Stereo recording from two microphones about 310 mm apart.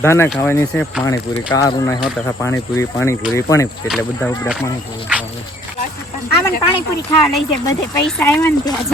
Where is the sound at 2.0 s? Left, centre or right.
Centre.